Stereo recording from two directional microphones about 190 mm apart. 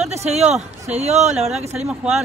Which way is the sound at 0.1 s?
35° right (ahead or behind).